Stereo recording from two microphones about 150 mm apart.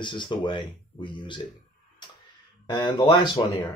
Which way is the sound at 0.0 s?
30° left (ahead or behind).